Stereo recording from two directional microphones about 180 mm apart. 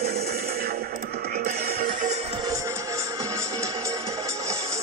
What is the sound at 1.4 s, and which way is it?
Music, 45° right (ahead or behind).